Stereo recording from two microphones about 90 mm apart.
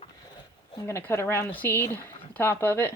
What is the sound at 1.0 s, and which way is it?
Speech, 25° left (ahead or behind).